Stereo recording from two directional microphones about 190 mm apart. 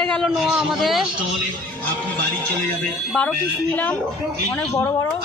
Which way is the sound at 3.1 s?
5° left (ahead or behind).